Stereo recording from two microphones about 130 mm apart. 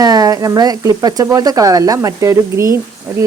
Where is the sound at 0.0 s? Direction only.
30° right (ahead or behind).